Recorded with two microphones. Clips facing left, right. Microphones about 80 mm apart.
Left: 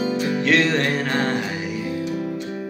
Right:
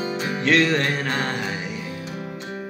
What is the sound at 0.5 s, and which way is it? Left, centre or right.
Music, centre.